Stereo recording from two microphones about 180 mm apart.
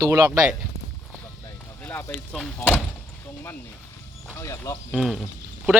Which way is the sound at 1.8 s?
10° left (ahead or behind).